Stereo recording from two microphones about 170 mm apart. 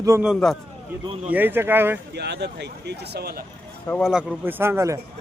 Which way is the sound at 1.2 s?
10° right (ahead or behind).